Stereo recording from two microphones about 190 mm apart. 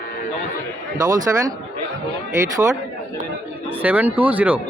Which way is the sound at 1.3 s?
10° right (ahead or behind).